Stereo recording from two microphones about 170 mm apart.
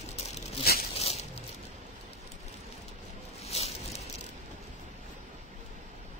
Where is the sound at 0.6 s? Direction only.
65° left (ahead or behind).